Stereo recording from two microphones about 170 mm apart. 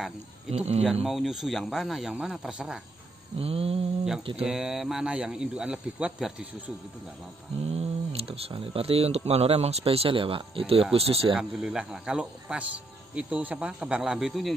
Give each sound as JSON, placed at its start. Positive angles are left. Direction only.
{"t": 0.5, "sound": "speech", "side_deg": -35}
{"t": 1.0, "sound": "speech", "side_deg": 0}
{"t": 3.3, "sound": "speech", "side_deg": -35}
{"t": 4.4, "sound": "speech", "side_deg": -5}
{"t": 7.7, "sound": "speech", "side_deg": -35}
{"t": 11.3, "sound": "speech", "side_deg": -5}